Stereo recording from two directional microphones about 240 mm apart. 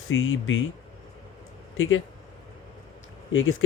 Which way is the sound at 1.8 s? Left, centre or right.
Left.